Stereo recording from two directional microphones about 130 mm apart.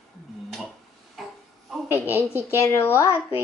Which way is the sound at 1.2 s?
Centre (ahead or behind).